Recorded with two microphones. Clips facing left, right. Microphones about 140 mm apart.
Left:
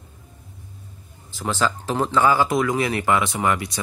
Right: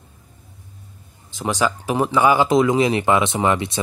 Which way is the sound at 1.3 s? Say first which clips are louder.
Right 2 dB; 15° right (ahead or behind).